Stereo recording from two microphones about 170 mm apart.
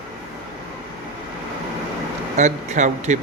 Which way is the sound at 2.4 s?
45° right (ahead or behind).